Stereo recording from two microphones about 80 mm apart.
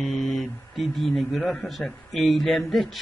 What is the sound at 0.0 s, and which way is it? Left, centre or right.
Speech, centre.